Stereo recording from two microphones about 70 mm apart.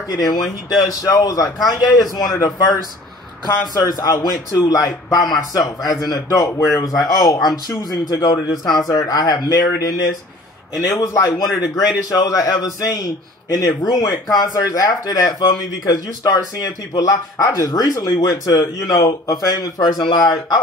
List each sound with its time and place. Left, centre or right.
0.1 s a man's voice: left
8.9 s a man's voice: left
9.5 s a man's voice: left
18.6 s speech: left
19.0 s a man's voice: left